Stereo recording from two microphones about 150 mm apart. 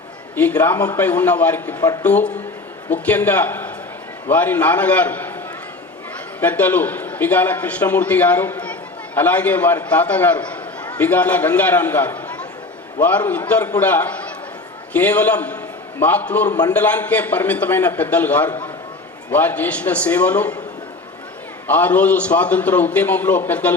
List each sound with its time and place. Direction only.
0.3 s a man's voice: 10° left (ahead or behind)
1.8 s speech: 25° left (ahead or behind)
2.0 s a man's voice: 10° left (ahead or behind)
6.4 s a man's voice: 10° left (ahead or behind)
21.7 s a man's voice: 10° left (ahead or behind)